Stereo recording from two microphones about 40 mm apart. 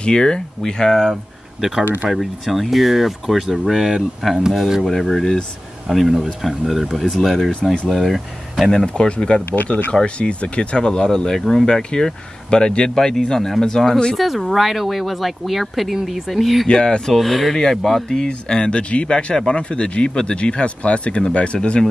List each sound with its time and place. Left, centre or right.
0.0 s speech: centre
1.1 s speech: centre
8.9 s speech: left
10.9 s speech: centre
12.9 s speech: centre
14.1 s speech: centre
16.6 s speech: left
17.1 s speech: centre; by 21.8 s left